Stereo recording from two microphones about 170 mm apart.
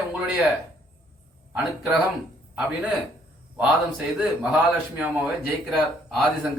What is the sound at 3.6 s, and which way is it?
A man's voice, 5° right (ahead or behind).